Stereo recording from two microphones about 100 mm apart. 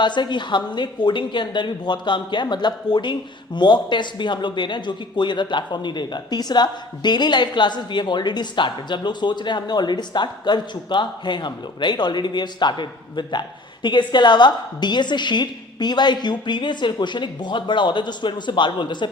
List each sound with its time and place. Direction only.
0.0 s a woman's voice: 50° left (ahead or behind)